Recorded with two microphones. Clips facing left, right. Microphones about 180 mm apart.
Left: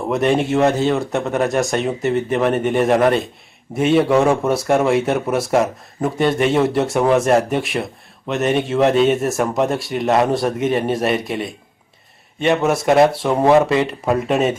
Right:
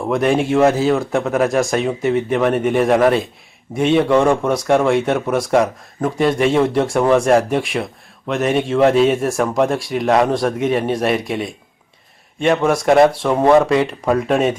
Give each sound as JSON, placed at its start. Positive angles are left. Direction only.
{"t": 0.0, "sound": "speech", "side_deg": 0}